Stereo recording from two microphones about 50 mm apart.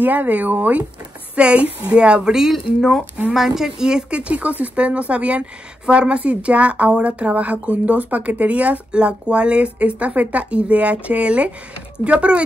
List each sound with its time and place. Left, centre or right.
0.0 s speech: right
2.3 s speech: centre; by 12.4 s right